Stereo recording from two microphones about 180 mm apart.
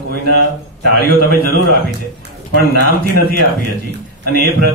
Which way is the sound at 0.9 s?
60° right (ahead or behind).